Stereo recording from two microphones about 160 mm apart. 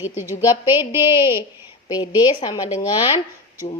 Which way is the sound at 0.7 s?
15° right (ahead or behind).